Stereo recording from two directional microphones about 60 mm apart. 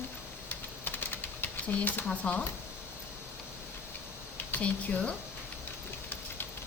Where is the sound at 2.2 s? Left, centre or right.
Left.